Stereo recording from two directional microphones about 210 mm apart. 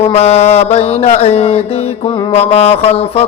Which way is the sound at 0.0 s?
30° left (ahead or behind).